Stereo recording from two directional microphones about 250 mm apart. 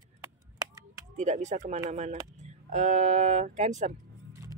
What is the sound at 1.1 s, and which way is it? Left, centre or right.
Speech, right.